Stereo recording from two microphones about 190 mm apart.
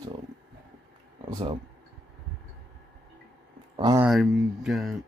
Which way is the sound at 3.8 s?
20° right (ahead or behind).